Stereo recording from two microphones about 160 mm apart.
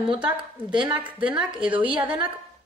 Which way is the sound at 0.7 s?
30° right (ahead or behind).